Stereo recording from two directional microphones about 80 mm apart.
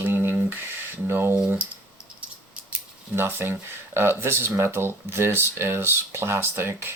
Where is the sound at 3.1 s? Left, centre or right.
Right.